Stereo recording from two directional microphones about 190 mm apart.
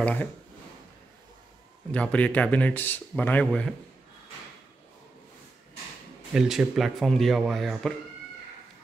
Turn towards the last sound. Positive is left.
turn(degrees=0)  # may be behind; listen again after turning